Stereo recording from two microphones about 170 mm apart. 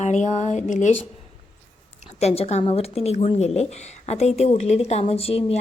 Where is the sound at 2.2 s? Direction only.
40° left (ahead or behind).